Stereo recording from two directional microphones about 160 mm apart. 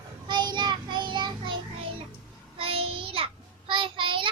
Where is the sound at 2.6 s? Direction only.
35° right (ahead or behind).